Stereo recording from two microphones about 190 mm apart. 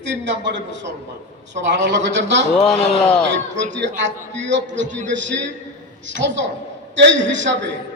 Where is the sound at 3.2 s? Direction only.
70° right (ahead or behind).